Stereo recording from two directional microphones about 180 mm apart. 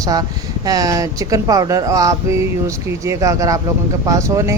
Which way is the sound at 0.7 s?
20° right (ahead or behind).